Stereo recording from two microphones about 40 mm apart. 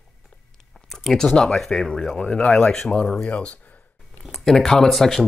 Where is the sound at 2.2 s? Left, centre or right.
Left; by 3.1 s centre.